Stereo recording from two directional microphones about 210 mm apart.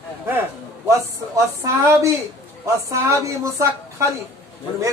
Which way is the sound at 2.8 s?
15° right (ahead or behind).